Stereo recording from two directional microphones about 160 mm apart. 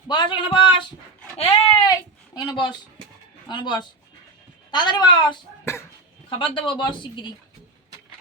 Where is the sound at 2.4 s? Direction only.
30° left (ahead or behind).